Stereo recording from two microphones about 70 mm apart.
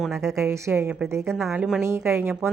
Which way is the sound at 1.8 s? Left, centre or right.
Right.